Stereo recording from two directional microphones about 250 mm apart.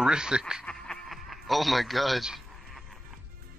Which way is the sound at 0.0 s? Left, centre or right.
Centre.